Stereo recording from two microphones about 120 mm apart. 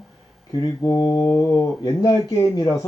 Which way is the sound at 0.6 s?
35° left (ahead or behind).